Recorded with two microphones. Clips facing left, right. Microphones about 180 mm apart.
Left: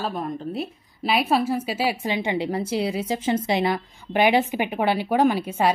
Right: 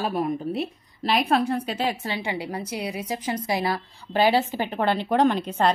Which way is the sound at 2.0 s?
20° left (ahead or behind).